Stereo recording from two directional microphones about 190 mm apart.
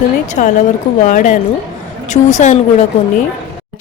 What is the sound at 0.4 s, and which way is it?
Speech, 45° left (ahead or behind).